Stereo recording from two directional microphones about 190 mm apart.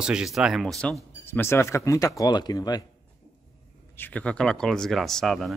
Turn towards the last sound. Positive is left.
turn(degrees=0)  # may be behind; listen again after turning